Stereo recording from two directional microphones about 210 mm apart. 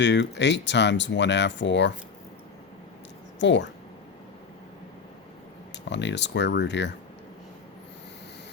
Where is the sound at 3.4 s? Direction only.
60° left (ahead or behind).